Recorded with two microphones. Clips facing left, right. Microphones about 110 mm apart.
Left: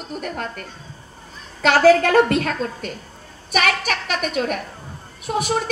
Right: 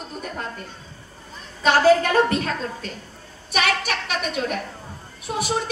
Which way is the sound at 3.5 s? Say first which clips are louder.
Left 2 dB; 50° left (ahead or behind).